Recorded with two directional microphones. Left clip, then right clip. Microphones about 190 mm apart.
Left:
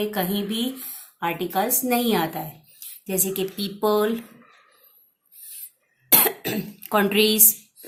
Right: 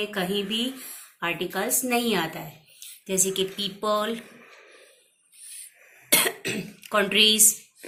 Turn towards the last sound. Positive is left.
turn(degrees=50)  # may be behind; listen again after turning